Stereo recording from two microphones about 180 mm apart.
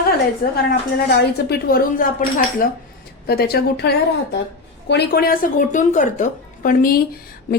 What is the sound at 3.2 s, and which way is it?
A woman's voice, 60° left (ahead or behind).